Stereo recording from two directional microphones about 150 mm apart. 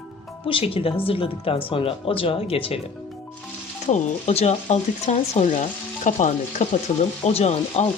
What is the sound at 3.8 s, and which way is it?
Speech, 45° left (ahead or behind).